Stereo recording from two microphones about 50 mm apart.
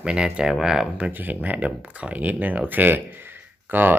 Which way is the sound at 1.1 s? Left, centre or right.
Right.